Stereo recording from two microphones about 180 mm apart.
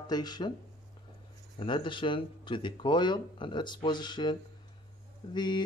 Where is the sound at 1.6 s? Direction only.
25° left (ahead or behind).